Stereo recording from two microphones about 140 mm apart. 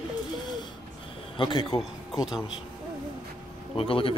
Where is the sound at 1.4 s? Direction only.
35° left (ahead or behind).